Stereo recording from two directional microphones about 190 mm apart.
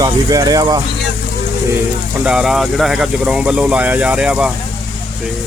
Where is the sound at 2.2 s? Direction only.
5° right (ahead or behind).